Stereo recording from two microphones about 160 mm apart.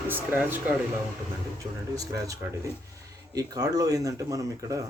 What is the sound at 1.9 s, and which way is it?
Speech, 20° right (ahead or behind).